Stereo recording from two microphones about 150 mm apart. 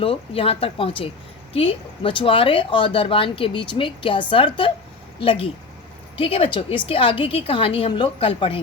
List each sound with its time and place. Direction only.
0.0 s a woman's voice: 40° left (ahead or behind)